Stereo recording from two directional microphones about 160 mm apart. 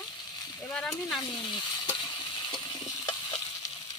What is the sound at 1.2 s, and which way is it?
Stir, 25° left (ahead or behind).